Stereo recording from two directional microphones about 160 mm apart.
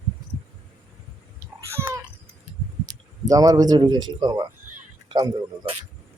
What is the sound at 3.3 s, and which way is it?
A man's voice, 25° right (ahead or behind).